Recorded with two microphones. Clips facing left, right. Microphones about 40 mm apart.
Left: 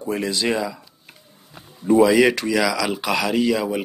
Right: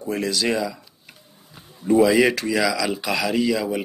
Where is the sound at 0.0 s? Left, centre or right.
Left.